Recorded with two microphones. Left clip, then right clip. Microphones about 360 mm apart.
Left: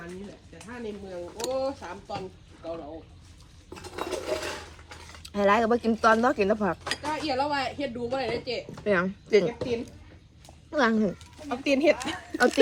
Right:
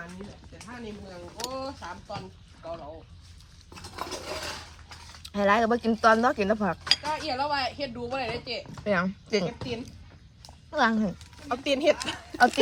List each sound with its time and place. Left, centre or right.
1.4 s speech: centre
2.6 s speech: centre
3.9 s a sound: centre
5.2 s speech: centre
11.2 s speech: centre